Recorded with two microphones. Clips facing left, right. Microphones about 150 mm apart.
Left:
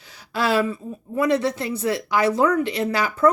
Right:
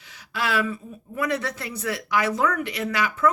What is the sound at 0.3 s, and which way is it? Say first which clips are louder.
Speech: left 5 dB; 30° left (ahead or behind).